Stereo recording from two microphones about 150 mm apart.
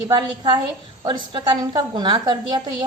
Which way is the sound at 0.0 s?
30° right (ahead or behind).